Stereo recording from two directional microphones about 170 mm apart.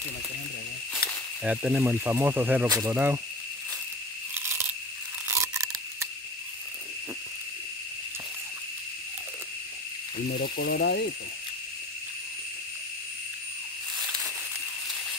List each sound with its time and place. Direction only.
1.4 s speech: 5° right (ahead or behind)
5.3 s a sound: 15° right (ahead or behind)
10.2 s speech: 65° left (ahead or behind)